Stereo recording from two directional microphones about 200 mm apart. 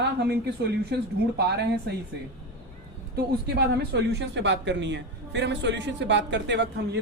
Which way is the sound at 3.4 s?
55° right (ahead or behind).